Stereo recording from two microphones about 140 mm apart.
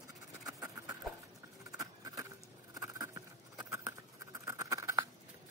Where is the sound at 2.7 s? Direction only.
25° right (ahead or behind).